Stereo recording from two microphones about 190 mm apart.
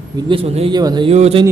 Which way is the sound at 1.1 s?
35° right (ahead or behind).